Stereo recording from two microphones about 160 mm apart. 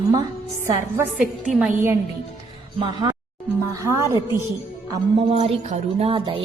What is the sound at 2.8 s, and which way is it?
Speech, 30° right (ahead or behind).